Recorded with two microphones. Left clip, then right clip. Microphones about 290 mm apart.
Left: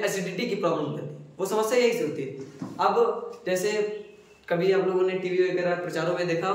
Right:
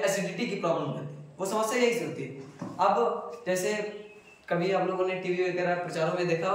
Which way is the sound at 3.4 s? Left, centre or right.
Centre.